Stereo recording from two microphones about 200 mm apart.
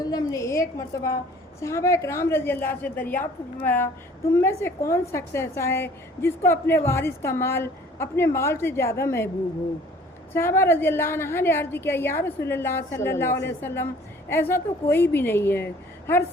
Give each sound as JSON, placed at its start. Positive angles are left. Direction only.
{"t": 0.0, "sound": "a woman's voice", "side_deg": 20}
{"t": 10.3, "sound": "a woman's voice", "side_deg": 10}